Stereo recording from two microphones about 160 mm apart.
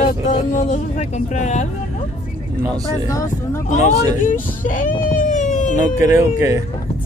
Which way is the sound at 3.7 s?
50° left (ahead or behind).